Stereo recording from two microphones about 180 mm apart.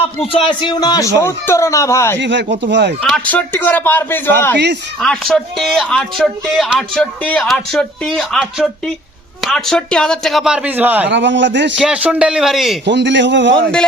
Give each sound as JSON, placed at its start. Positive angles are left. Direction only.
{"t": 0.3, "sound": "a man's voice", "side_deg": 30}
{"t": 2.1, "sound": "speech", "side_deg": -80}
{"t": 3.0, "sound": "a man's voice", "side_deg": 10}
{"t": 4.5, "sound": "speech", "side_deg": -70}
{"t": 4.9, "sound": "speech", "side_deg": 5}
{"t": 11.1, "sound": "a man's voice", "side_deg": -90}
{"t": 11.8, "sound": "speech", "side_deg": -5}
{"t": 12.8, "sound": "a man's voice", "side_deg": -80}